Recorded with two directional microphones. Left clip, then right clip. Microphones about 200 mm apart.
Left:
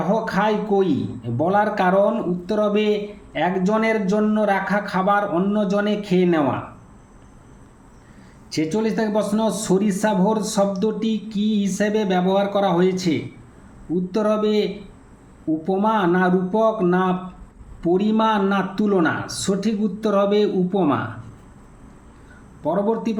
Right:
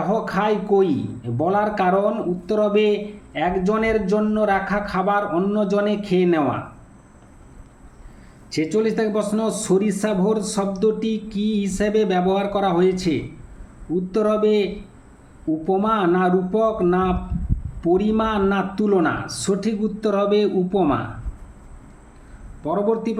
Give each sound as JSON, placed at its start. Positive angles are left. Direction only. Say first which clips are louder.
{"t": 0.0, "sound": "a man's voice", "louder": "left 1 dB", "side_deg": -5}
{"t": 8.4, "sound": "a man's voice", "louder": "right 2 dB", "side_deg": -5}
{"t": 22.6, "sound": "speech", "louder": "even", "side_deg": -5}